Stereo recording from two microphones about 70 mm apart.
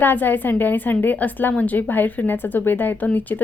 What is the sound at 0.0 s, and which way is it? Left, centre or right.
Speech, left.